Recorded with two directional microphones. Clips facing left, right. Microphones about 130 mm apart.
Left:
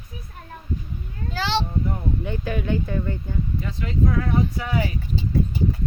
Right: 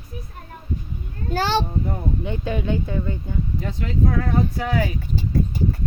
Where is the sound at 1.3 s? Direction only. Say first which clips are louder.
Right 4 dB; 45° right (ahead or behind).